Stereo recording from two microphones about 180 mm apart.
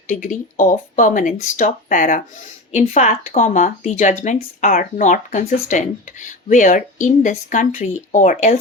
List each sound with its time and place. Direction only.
0.1 s speech: 45° left (ahead or behind)